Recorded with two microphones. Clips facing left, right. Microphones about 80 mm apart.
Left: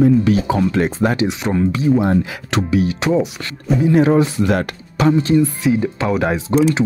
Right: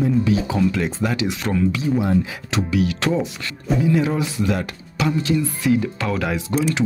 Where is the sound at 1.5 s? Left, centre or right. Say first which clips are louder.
Left 5 dB; left.